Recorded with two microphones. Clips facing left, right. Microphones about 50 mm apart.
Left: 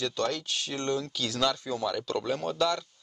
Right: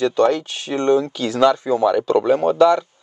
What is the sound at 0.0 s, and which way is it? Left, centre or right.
Speech, right.